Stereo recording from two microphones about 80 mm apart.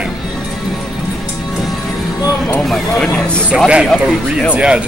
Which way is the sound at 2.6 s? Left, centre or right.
Centre.